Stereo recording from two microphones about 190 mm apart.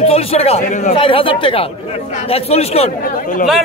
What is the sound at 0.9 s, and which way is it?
A man's voice, 30° left (ahead or behind).